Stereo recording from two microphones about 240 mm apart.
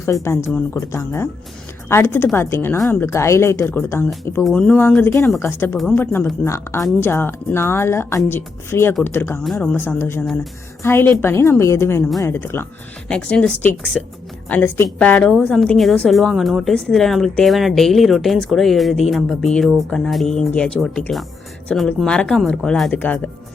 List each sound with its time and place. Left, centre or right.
0.0 s a woman's voice: centre